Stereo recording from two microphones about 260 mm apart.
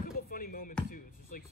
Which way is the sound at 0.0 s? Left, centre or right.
Left.